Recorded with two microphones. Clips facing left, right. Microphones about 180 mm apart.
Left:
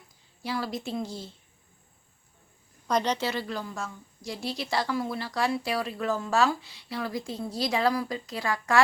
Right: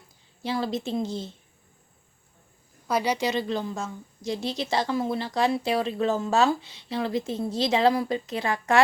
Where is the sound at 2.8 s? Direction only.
10° right (ahead or behind).